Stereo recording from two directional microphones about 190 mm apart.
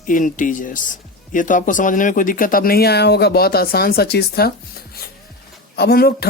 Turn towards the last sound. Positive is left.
turn(degrees=55)  # may be behind; listen again after turning